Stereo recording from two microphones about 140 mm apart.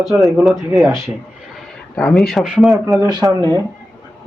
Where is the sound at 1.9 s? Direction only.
5° left (ahead or behind).